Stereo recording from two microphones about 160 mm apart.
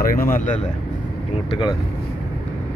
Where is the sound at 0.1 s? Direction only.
60° left (ahead or behind).